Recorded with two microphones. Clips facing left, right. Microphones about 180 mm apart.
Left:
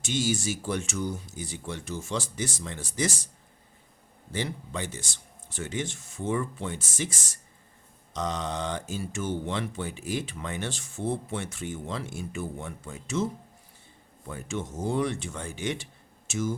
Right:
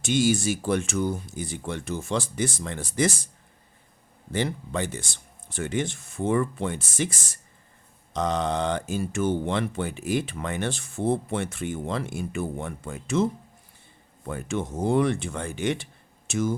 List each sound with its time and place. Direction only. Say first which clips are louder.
0.0 s speech: right 6 dB; 60° right (ahead or behind)
4.3 s speech: right 5 dB; 55° right (ahead or behind)
14.3 s speech: right 5 dB; 60° right (ahead or behind)